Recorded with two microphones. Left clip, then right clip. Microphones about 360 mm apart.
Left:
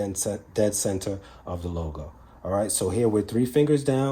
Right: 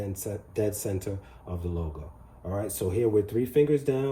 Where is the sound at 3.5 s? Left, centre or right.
Left.